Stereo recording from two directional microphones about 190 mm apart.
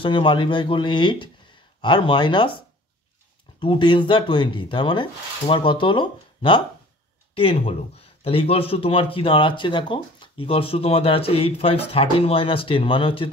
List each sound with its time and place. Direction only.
0.0 s speech: 25° left (ahead or behind)